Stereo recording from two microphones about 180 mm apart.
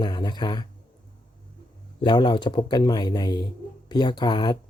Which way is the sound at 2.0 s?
25° left (ahead or behind).